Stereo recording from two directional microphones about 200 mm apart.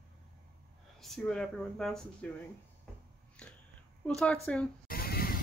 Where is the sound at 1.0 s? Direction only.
Centre (ahead or behind).